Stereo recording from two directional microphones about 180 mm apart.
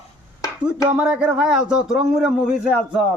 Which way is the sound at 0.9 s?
5° right (ahead or behind).